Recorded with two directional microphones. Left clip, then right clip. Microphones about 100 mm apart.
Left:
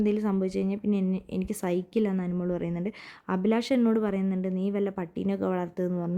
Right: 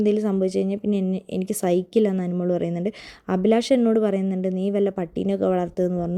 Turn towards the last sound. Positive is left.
turn(degrees=-25)  # may be behind; listen again after turning